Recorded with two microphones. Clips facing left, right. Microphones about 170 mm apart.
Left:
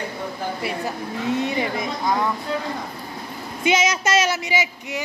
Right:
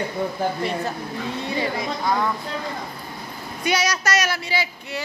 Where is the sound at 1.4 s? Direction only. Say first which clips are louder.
Left 2 dB; 20° left (ahead or behind).